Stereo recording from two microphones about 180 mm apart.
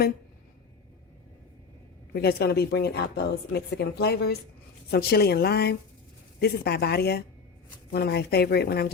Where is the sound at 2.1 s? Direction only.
60° left (ahead or behind).